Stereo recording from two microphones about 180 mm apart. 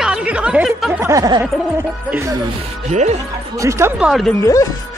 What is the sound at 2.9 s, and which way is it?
Speech, 40° right (ahead or behind).